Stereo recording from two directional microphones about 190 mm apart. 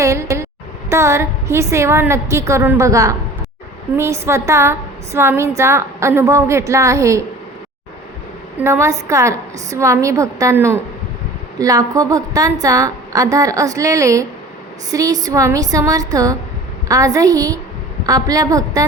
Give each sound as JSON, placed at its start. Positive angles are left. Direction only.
{"t": 0.0, "sound": "vehicle", "side_deg": -15}
{"t": 0.9, "sound": "a woman's voice", "side_deg": -15}
{"t": 8.6, "sound": "a woman's voice", "side_deg": -15}